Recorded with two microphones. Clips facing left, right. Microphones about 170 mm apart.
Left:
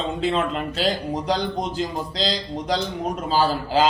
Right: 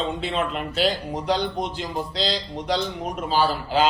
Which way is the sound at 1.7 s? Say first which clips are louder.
Left 2 dB; 40° left (ahead or behind).